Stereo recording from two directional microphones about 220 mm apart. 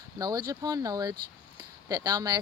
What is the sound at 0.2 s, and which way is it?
Speech, 20° right (ahead or behind).